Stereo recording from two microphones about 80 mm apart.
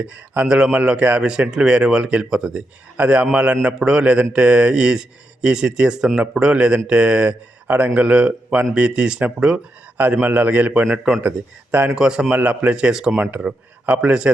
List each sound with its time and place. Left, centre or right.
0.0 s a man's voice: centre
10.2 s a man's voice: right